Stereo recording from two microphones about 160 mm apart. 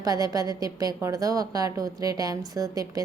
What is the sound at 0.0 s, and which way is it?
A woman's voice, 25° right (ahead or behind).